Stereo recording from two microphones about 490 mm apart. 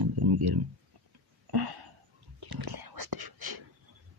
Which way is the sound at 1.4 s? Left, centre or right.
Right.